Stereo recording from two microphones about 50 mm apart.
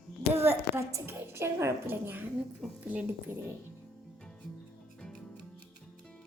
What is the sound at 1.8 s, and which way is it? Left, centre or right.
Speech, right.